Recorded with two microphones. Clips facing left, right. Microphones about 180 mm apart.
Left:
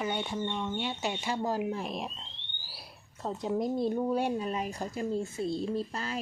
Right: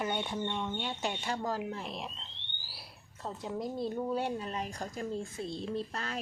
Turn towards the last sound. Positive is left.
turn(degrees=0)  # may be behind; listen again after turning